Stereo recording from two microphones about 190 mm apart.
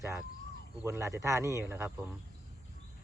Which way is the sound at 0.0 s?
15° right (ahead or behind).